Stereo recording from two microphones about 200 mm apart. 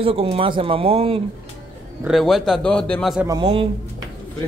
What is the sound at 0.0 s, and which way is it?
Speech, 30° right (ahead or behind).